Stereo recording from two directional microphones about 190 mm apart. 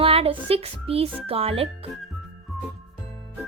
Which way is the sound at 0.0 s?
30° right (ahead or behind).